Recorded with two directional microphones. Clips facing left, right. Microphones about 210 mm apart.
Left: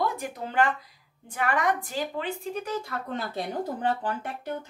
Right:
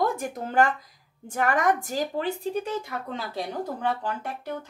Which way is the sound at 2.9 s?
15° right (ahead or behind).